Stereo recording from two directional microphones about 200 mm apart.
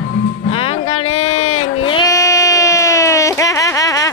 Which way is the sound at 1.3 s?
90° left.